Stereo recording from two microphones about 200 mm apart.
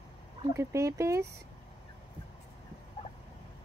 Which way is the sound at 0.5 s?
15° right (ahead or behind).